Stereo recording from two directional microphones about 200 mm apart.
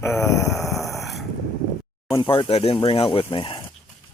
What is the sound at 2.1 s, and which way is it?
Speech, 20° left (ahead or behind).